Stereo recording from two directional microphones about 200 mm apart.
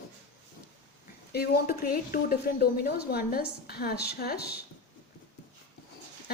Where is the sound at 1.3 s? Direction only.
50° left (ahead or behind).